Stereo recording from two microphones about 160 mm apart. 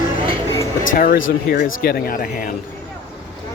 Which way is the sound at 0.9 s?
60° left (ahead or behind).